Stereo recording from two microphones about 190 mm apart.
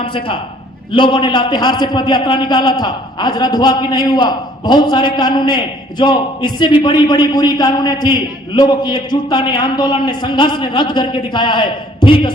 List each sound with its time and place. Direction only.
0.9 s a man's voice: 25° left (ahead or behind)